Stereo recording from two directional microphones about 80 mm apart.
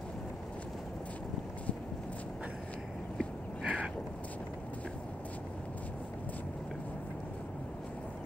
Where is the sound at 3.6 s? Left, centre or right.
Centre.